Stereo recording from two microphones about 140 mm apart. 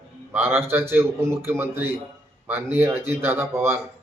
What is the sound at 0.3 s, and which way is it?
A man's voice, 15° right (ahead or behind).